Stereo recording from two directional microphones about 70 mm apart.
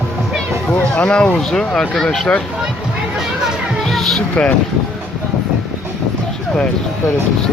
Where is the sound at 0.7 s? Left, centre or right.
Centre.